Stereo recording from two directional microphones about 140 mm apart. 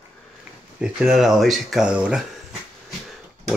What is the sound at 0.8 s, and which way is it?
Speech, 5° right (ahead or behind).